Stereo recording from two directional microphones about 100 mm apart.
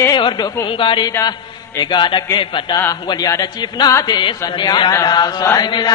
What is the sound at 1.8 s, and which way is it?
Speech, 50° left (ahead or behind).